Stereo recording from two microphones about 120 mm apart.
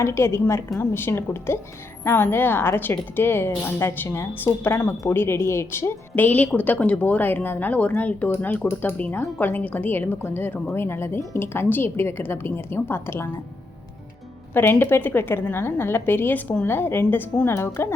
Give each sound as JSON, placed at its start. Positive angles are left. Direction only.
{"t": 0.0, "sound": "a woman's voice", "side_deg": 20}
{"t": 14.5, "sound": "a woman's voice", "side_deg": 15}